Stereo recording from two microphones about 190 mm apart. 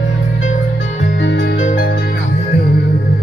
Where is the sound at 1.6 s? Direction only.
40° left (ahead or behind).